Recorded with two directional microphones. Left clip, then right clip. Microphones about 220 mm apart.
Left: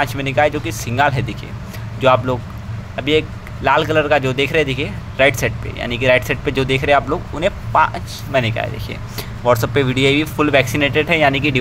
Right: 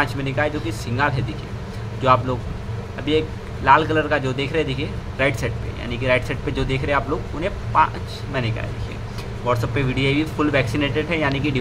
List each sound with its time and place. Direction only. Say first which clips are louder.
0.0 s speech: left 6 dB; 15° left (ahead or behind)